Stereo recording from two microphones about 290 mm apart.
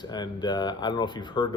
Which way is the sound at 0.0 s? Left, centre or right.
Centre.